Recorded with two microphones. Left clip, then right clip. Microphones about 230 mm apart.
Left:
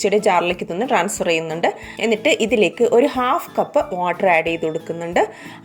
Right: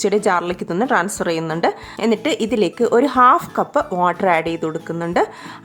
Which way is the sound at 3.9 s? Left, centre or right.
Right.